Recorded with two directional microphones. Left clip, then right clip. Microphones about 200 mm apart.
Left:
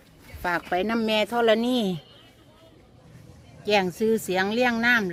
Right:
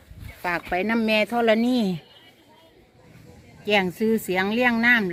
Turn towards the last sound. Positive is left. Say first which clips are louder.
# right 2 dB
turn(degrees=0)  # may be behind; listen again after turning